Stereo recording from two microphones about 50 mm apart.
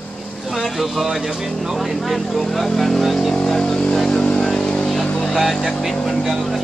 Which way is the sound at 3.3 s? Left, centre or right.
Centre.